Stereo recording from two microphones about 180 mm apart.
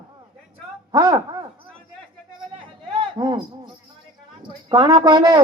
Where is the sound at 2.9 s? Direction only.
25° right (ahead or behind).